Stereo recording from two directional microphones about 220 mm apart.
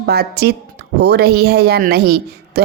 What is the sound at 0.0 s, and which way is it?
Speech, 45° right (ahead or behind).